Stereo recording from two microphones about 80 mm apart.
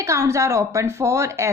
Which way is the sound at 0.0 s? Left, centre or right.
Right.